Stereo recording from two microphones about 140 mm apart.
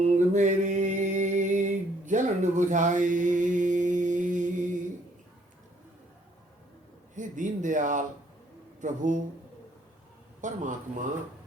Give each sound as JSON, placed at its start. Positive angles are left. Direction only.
{"t": 0.3, "sound": "a sound", "side_deg": -60}
{"t": 7.2, "sound": "a man's voice", "side_deg": -65}
{"t": 10.4, "sound": "a man's voice", "side_deg": -65}